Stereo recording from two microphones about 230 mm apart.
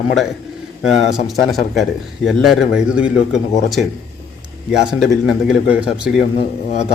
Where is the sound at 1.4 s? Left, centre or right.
Centre.